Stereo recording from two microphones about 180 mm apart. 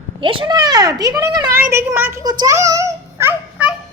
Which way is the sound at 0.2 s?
30° right (ahead or behind).